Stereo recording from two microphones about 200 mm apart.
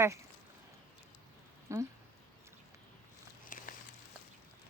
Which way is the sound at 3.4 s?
45° left (ahead or behind).